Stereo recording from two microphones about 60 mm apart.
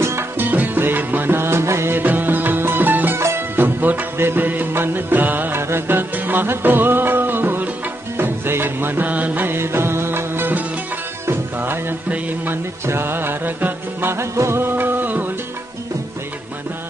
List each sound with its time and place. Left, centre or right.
0.4 s music: right
2.0 s music: right
3.2 s music: right
3.5 s music: right
5.6 s music: right
12.1 s music: right
12.8 s music: right
14.1 s music: right